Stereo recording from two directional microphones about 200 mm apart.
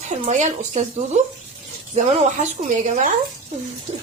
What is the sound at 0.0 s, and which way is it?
Speech, 35° right (ahead or behind).